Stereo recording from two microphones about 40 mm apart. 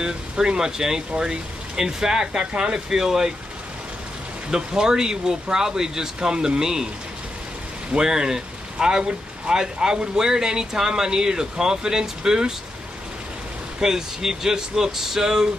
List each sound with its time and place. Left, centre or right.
0.0 s speech: centre
4.5 s speech: centre
8.0 s speech: centre
13.7 s speech: centre